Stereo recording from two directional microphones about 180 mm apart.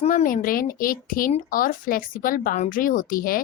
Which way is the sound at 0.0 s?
45° left (ahead or behind).